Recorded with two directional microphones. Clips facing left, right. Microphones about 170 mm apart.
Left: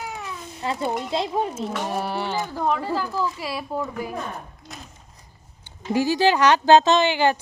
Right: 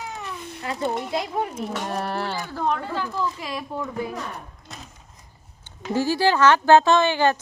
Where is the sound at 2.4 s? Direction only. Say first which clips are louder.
Left 2 dB; 15° left (ahead or behind).